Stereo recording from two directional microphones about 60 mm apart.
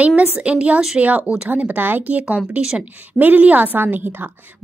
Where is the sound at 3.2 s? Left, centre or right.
Right.